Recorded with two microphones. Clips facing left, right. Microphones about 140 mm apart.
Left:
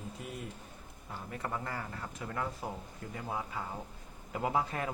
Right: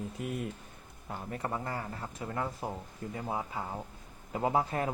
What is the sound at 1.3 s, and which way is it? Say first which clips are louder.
Speech: right 2 dB; 30° right (ahead or behind).